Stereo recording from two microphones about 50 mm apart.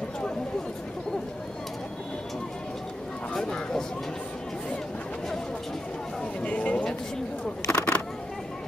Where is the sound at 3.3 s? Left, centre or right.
Centre.